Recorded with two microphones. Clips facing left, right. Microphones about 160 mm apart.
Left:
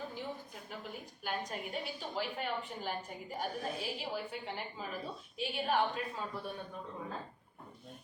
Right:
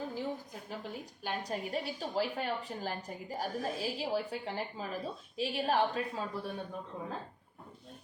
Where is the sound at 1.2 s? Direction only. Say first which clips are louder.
Right 2 dB; 35° right (ahead or behind).